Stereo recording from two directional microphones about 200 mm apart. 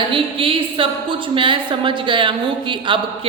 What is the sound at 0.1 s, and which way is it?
A woman's voice, 25° right (ahead or behind).